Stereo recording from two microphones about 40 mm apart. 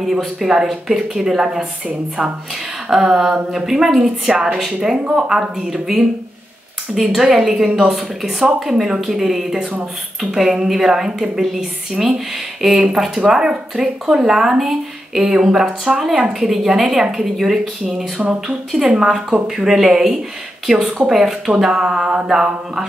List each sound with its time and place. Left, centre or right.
0.0 s speech: centre
2.9 s a woman's voice: centre
21.5 s mantra: centre
22.3 s speech: centre